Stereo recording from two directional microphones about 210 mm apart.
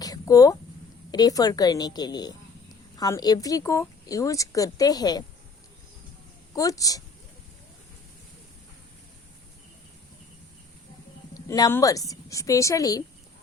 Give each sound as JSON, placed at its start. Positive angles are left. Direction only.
{"t": 0.0, "sound": "a sound", "side_deg": 15}
{"t": 1.1, "sound": "a woman's voice", "side_deg": 20}
{"t": 6.5, "sound": "speech", "side_deg": 15}
{"t": 11.3, "sound": "speech", "side_deg": 15}